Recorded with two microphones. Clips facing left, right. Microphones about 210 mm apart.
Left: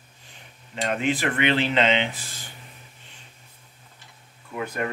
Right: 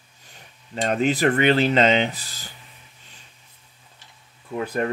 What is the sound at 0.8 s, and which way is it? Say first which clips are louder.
Speech: right 5 dB; 40° right (ahead or behind).